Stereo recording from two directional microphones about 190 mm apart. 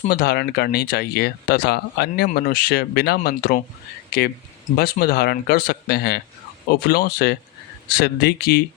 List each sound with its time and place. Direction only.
0.1 s speech: 55° left (ahead or behind)